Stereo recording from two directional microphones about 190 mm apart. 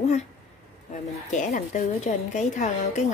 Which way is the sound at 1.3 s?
40° left (ahead or behind).